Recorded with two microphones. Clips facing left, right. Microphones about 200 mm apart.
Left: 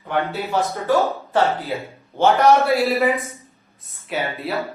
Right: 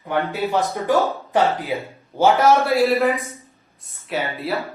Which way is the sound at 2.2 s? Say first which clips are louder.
Left 1 dB; centre (ahead or behind).